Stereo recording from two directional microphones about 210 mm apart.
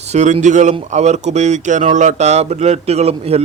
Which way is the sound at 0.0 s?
35° right (ahead or behind).